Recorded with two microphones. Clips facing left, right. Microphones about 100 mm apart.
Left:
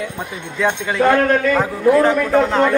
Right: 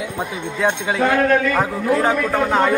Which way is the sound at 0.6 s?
5° right (ahead or behind).